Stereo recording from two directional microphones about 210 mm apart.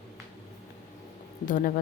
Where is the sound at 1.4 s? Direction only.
40° left (ahead or behind).